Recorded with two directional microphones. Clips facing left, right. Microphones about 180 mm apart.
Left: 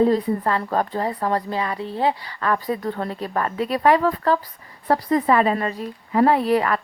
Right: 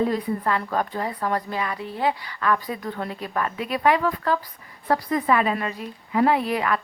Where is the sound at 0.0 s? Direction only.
35° left (ahead or behind).